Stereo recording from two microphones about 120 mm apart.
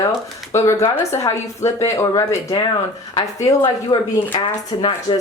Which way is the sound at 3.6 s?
45° left (ahead or behind).